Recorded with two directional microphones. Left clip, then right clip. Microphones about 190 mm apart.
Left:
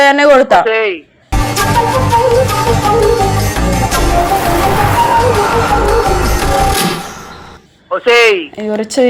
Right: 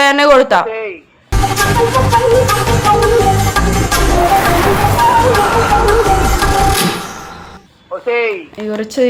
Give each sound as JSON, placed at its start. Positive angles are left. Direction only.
{"t": 0.0, "sound": "speech", "side_deg": 5}
{"t": 0.7, "sound": "speech", "side_deg": 30}
{"t": 1.3, "sound": "music", "side_deg": 0}
{"t": 8.0, "sound": "speech", "side_deg": 30}